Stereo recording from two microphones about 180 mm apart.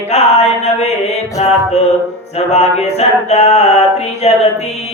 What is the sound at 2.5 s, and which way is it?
Mantra, 35° left (ahead or behind).